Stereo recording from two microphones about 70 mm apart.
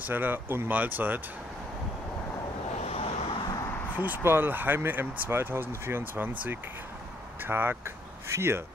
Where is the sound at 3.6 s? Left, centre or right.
Left.